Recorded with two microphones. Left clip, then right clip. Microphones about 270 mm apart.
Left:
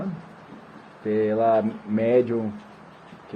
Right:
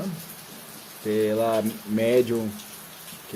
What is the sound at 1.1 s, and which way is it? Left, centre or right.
Speech, right.